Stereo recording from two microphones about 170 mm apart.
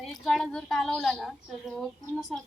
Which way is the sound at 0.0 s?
Centre (ahead or behind).